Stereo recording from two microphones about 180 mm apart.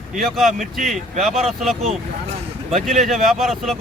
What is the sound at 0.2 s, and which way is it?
Speech, centre (ahead or behind).